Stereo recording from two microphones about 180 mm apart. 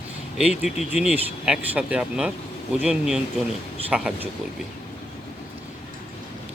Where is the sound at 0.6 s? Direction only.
5° right (ahead or behind).